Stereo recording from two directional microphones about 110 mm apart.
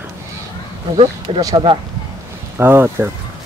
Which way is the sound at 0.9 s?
65° right (ahead or behind).